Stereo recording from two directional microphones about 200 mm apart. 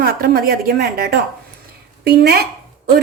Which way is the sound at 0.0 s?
50° right (ahead or behind).